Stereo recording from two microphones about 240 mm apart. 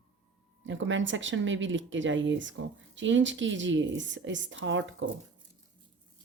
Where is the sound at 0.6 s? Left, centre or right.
Right.